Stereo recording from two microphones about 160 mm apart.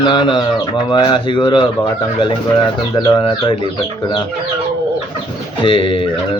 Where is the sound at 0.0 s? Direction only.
30° left (ahead or behind).